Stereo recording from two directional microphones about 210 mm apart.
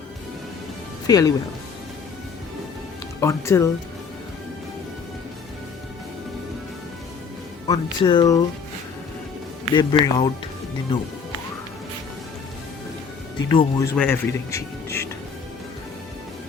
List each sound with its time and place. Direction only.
1.0 s speech: 15° left (ahead or behind)
3.2 s speech: 15° left (ahead or behind)
7.7 s speech: 20° left (ahead or behind)
9.7 s speech: 25° left (ahead or behind)
13.5 s speech: 20° left (ahead or behind)